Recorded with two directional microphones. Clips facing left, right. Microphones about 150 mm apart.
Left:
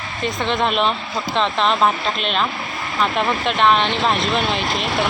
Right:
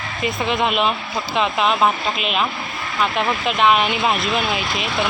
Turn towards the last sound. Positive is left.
turn(degrees=-5)  # may be behind; listen again after turning